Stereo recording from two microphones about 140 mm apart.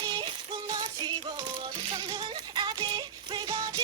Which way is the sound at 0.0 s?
30° right (ahead or behind).